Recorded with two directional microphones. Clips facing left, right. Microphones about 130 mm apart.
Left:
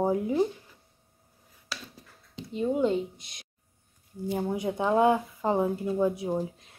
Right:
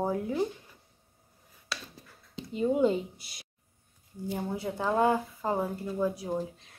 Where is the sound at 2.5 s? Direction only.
5° right (ahead or behind).